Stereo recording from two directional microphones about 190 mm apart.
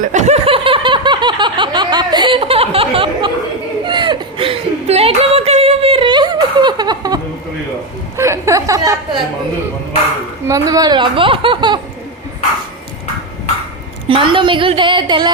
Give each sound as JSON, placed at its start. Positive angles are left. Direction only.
{"t": 0.0, "sound": "snicker", "side_deg": -40}
{"t": 3.8, "sound": "chuckle", "side_deg": -25}
{"t": 8.1, "sound": "a woman's voice", "side_deg": -15}
{"t": 10.4, "sound": "speech", "side_deg": -20}
{"t": 14.1, "sound": "speech", "side_deg": -25}